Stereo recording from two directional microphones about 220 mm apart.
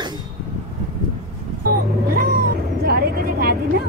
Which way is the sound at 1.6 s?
45° right (ahead or behind).